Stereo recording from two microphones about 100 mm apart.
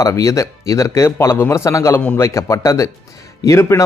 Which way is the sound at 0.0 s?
30° left (ahead or behind).